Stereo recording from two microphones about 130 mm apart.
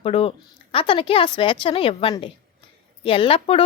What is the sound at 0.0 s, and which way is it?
A woman's voice, 50° left (ahead or behind).